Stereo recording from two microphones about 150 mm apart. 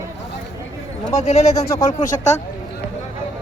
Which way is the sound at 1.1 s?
45° left (ahead or behind).